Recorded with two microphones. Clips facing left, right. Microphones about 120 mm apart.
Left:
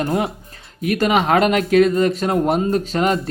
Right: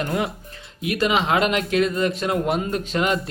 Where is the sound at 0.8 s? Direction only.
45° left (ahead or behind).